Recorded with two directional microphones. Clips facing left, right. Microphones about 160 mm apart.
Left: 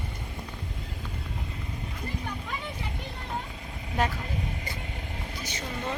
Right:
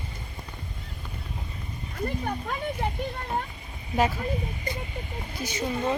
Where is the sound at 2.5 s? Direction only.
50° right (ahead or behind).